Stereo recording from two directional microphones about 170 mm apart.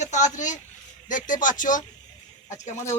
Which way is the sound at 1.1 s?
50° left (ahead or behind).